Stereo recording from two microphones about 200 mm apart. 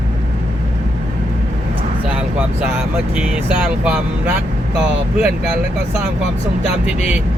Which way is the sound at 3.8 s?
5° right (ahead or behind).